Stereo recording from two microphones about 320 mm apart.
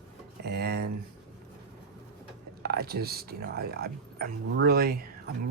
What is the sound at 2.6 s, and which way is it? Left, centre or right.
Speech, right.